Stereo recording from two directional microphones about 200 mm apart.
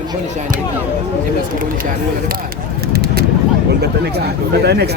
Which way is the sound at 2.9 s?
50° right (ahead or behind).